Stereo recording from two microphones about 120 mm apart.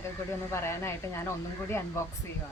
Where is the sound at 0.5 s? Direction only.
20° left (ahead or behind).